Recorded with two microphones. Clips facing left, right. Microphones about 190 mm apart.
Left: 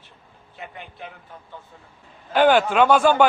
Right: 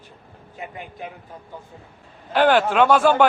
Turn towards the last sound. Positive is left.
turn(degrees=0)  # may be behind; listen again after turning